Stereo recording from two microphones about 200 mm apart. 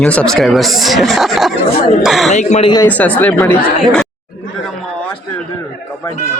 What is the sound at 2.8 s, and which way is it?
Speech, 5° left (ahead or behind).